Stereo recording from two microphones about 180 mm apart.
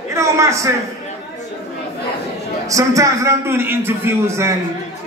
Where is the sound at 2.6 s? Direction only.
20° right (ahead or behind).